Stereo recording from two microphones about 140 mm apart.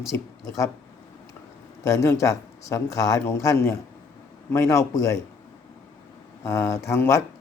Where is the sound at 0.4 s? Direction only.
20° left (ahead or behind).